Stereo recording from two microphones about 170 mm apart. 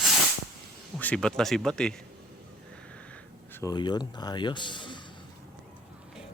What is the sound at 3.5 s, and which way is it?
Speech, 20° left (ahead or behind).